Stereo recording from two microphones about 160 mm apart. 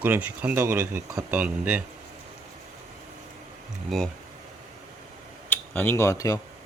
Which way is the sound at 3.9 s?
Centre (ahead or behind).